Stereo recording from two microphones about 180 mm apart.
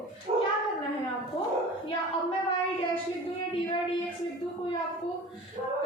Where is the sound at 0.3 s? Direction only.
35° right (ahead or behind).